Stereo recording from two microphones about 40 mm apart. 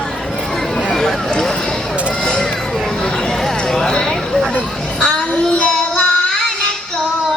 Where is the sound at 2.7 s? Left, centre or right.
Centre.